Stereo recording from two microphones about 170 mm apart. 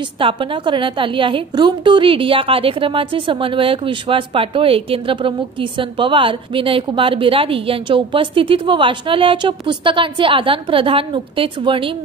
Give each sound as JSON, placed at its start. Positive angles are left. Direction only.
{"t": 0.2, "sound": "a woman's voice", "side_deg": -30}